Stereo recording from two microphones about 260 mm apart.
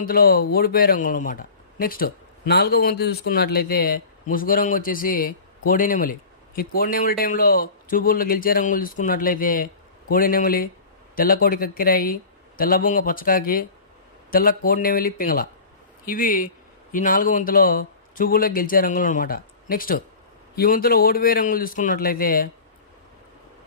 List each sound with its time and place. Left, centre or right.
0.0 s a man's voice: left